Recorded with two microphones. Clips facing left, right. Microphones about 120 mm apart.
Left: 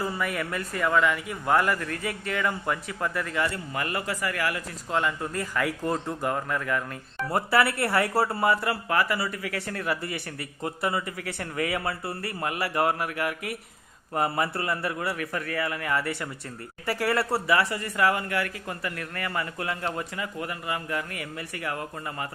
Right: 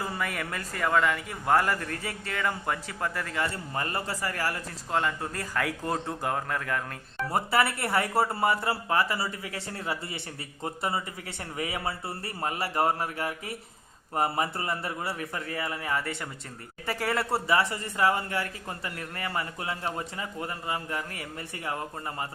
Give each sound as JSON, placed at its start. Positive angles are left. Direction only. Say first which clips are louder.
{"t": 0.8, "sound": "speech", "louder": "left 1 dB", "side_deg": -40}
{"t": 7.3, "sound": "speech", "louder": "left 2 dB", "side_deg": -25}